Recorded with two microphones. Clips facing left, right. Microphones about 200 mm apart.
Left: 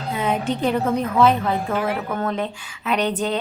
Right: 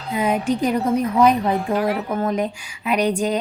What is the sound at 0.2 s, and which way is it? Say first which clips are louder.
A woman's voice: right 3 dB; 10° right (ahead or behind).